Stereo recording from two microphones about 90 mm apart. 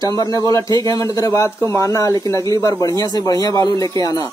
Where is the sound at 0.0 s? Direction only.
45° left (ahead or behind).